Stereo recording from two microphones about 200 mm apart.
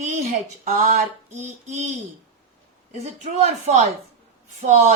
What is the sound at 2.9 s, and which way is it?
A woman's voice, 35° right (ahead or behind).